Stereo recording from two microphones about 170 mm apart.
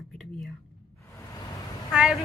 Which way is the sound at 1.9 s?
Centre (ahead or behind).